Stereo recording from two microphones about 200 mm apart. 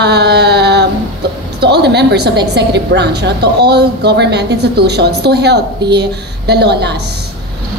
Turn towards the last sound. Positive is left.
turn(degrees=-55)  # may be behind; listen again after turning